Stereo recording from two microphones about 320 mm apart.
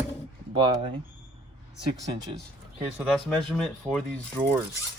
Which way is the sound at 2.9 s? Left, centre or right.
Centre.